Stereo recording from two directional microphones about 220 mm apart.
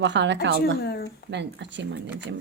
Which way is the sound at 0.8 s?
45° left (ahead or behind).